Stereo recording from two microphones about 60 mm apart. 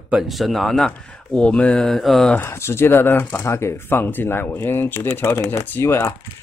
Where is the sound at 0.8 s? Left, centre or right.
Centre.